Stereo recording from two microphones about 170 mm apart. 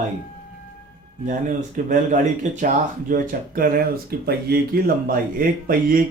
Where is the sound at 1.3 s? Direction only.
50° right (ahead or behind).